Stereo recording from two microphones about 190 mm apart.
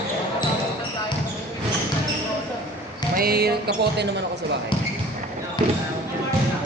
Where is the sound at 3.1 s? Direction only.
50° right (ahead or behind).